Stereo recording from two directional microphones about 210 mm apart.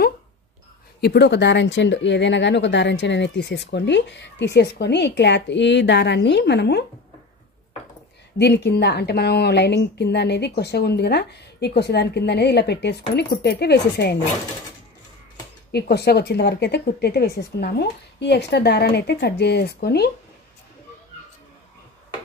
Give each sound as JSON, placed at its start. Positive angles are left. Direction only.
{"t": 1.0, "sound": "speech", "side_deg": 55}
{"t": 8.4, "sound": "a woman's voice", "side_deg": 50}
{"t": 15.7, "sound": "a woman's voice", "side_deg": 50}